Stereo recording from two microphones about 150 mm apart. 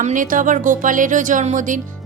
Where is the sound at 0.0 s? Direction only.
60° right (ahead or behind).